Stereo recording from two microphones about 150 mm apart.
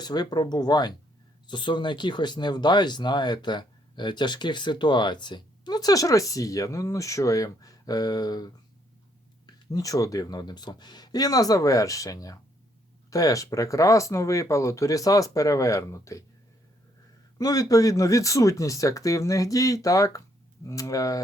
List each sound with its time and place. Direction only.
0.0 s speech: 25° left (ahead or behind)
9.7 s speech: 25° left (ahead or behind)
17.3 s speech: 25° left (ahead or behind)